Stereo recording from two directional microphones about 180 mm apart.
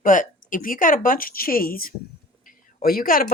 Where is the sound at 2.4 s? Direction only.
55° left (ahead or behind).